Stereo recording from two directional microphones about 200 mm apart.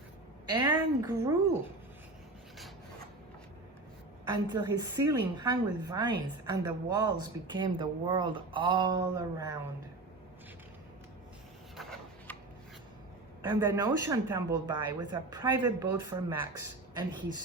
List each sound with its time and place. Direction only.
0.7 s a woman's voice: 15° right (ahead or behind)
4.4 s speech: 20° right (ahead or behind)
11.8 s a sound: centre (ahead or behind)
13.4 s speech: 25° right (ahead or behind)